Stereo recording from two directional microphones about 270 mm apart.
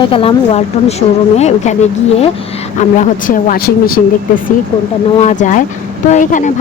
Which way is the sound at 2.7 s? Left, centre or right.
Left.